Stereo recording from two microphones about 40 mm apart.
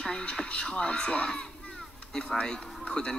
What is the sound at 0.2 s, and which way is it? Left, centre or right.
A man's voice, left.